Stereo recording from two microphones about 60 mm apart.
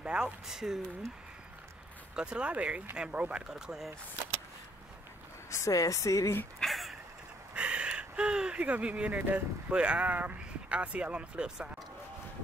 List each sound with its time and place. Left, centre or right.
0.0 s speech: centre
2.1 s speech: centre
5.7 s speech: left
6.6 s a sound: centre
7.5 s a sound: centre
8.6 s speech: right